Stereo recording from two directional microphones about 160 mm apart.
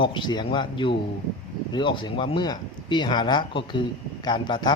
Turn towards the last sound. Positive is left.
turn(degrees=25)  # may be behind; listen again after turning